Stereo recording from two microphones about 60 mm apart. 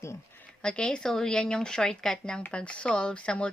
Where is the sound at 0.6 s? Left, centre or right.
Centre.